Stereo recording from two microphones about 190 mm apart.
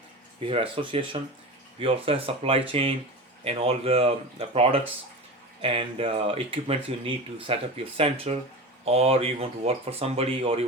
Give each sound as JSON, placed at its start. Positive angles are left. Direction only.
{"t": 0.3, "sound": "speech", "side_deg": -30}